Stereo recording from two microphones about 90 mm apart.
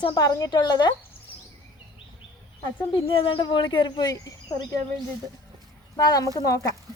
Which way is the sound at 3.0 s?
75° left (ahead or behind).